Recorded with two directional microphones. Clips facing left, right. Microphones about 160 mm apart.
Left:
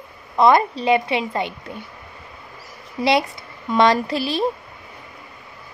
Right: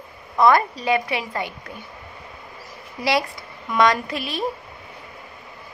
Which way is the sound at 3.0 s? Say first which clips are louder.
Left 3 dB; 25° left (ahead or behind).